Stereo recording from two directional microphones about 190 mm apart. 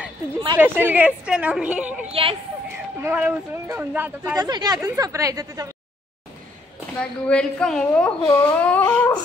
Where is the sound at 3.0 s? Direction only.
10° right (ahead or behind).